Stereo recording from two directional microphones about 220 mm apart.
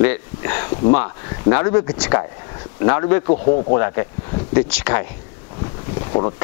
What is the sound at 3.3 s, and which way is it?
Speech, 35° left (ahead or behind).